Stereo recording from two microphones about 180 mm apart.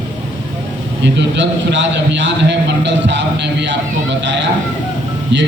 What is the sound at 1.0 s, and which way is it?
A man's voice, 85° right.